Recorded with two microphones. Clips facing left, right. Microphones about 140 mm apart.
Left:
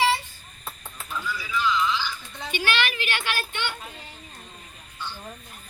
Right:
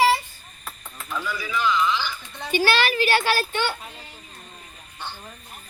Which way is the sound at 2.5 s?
35° right (ahead or behind).